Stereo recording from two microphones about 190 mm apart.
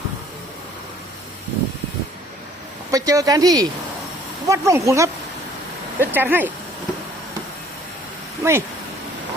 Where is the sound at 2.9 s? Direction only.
15° right (ahead or behind).